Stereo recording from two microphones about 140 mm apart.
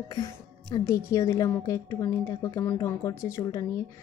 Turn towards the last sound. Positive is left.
turn(degrees=20)  # may be behind; listen again after turning